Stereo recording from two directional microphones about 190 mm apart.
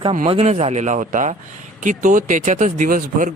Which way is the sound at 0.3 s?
30° right (ahead or behind).